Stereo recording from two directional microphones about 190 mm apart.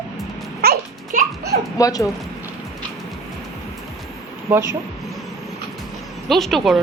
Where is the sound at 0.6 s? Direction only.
55° right (ahead or behind).